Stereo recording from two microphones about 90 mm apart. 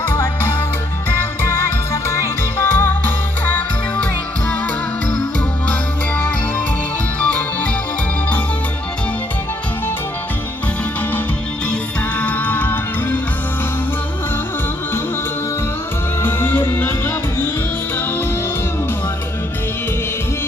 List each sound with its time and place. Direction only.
0.1 s music: 25° left (ahead or behind)
3.9 s music: 10° left (ahead or behind)
12.2 s music: 15° left (ahead or behind)
16.2 s music: 20° left (ahead or behind)